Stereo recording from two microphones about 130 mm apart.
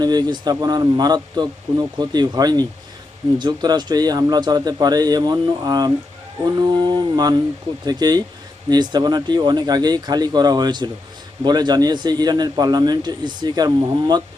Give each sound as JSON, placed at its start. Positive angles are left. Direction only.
{"t": 0.0, "sound": "a man's voice", "side_deg": -30}